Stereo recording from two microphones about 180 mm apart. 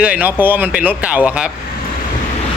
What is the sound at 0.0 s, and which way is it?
Speech, 10° right (ahead or behind).